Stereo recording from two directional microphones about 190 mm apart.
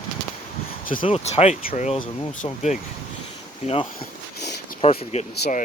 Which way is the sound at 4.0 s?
50° left (ahead or behind).